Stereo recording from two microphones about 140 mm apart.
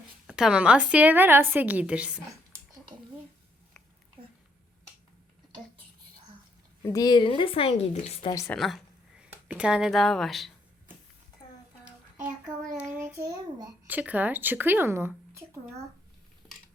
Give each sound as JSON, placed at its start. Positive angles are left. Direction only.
{"t": 0.3, "sound": "a woman's voice", "side_deg": -5}
{"t": 6.8, "sound": "a woman's voice", "side_deg": 25}
{"t": 8.5, "sound": "speech", "side_deg": 0}
{"t": 12.7, "sound": "child singing", "side_deg": -15}
{"t": 13.8, "sound": "a woman's voice", "side_deg": -10}